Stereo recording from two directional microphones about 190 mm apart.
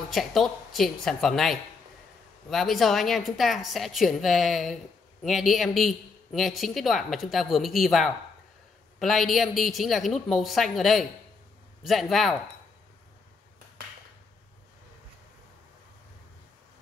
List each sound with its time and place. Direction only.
0.1 s a man's voice: centre (ahead or behind)